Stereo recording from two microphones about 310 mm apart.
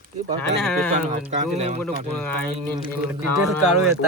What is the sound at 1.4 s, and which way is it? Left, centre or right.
Speech, right.